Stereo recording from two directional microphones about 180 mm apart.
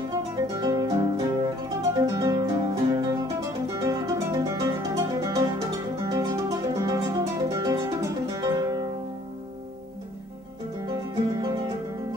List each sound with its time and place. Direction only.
0.1 s music: 20° right (ahead or behind)